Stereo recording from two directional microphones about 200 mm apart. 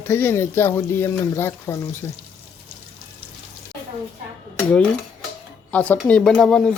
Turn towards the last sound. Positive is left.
turn(degrees=5)  # may be behind; listen again after turning